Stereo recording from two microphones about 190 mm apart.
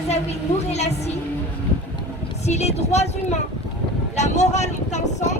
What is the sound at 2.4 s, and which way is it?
Speech, 35° left (ahead or behind).